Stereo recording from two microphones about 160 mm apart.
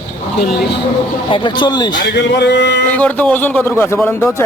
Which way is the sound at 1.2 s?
30° left (ahead or behind).